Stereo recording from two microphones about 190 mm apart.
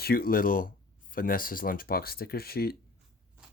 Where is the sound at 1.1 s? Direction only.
50° left (ahead or behind).